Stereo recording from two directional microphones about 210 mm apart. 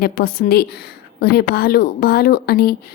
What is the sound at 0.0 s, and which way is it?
A woman's voice, 45° left (ahead or behind).